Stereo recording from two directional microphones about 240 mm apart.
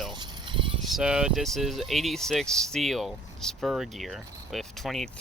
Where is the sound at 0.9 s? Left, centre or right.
Centre.